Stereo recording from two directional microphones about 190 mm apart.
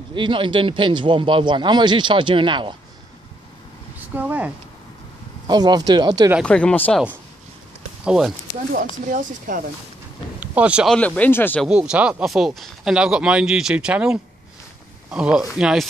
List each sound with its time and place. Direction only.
0.1 s a man's voice: 25° right (ahead or behind)
4.1 s speech: 10° right (ahead or behind)
5.5 s a man's voice: 20° right (ahead or behind)
6.4 s speech: 5° left (ahead or behind)
8.0 s speech: 5° right (ahead or behind)
9.0 s speech: 45° right (ahead or behind)
10.4 s speech: 5° right (ahead or behind)
11.0 s speech: 5° left (ahead or behind)
11.6 s speech: 5° right (ahead or behind)